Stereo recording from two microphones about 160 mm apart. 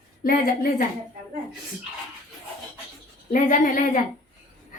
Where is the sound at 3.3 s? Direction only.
55° left (ahead or behind).